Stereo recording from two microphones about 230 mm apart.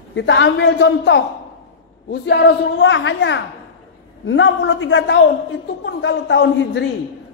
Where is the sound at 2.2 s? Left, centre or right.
Left.